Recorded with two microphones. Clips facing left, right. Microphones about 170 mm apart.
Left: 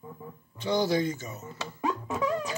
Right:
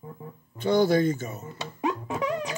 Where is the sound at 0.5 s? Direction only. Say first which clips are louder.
Right 5 dB; 55° right (ahead or behind).